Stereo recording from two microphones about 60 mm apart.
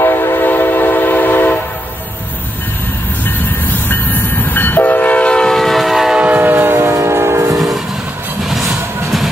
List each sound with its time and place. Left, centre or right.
0.0 s train: left
3.9 s train: left; by 6.1 s centre
6.1 s train: right
6.4 s train: right
6.9 s train: right
7.5 s train: centre